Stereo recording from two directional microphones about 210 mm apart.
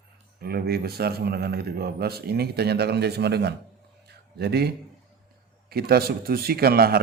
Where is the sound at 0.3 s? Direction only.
50° right (ahead or behind).